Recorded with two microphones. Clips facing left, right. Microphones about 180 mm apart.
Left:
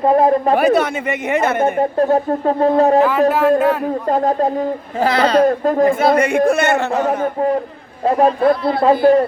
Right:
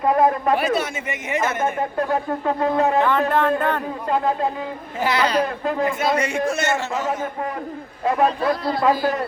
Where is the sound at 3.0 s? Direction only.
5° left (ahead or behind).